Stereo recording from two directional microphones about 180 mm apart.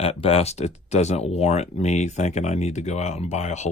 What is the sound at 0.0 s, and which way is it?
Speech, 35° left (ahead or behind).